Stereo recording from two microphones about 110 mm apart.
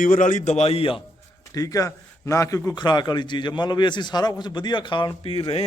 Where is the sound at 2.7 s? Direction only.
40° left (ahead or behind).